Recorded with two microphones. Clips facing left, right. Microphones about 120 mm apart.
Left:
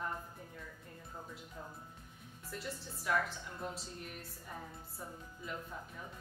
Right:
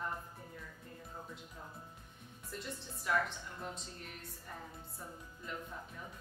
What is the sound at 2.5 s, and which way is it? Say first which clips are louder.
A woman's voice: left 1 dB; centre (ahead or behind).